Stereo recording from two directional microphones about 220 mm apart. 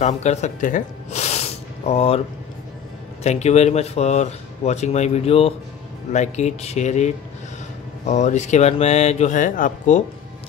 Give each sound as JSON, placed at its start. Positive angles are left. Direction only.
{"t": 0.0, "sound": "speech", "side_deg": 30}
{"t": 3.3, "sound": "speech", "side_deg": 30}